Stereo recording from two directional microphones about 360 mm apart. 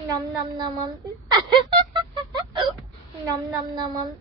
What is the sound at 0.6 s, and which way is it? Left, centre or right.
Music, centre.